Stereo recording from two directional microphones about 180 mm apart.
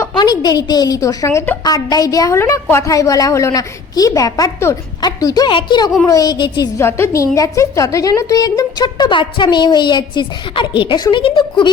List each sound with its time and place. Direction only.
0.0 s a woman's voice: 20° left (ahead or behind)